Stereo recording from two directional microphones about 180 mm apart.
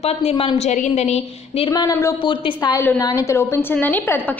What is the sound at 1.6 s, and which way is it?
A woman's voice, 20° left (ahead or behind).